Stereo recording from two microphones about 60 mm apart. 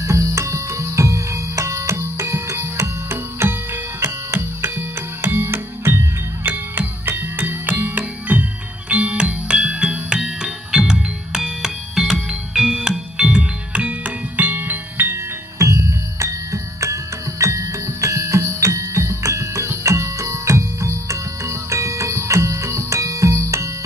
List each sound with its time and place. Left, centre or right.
0.0 s music: right
15.6 s music: right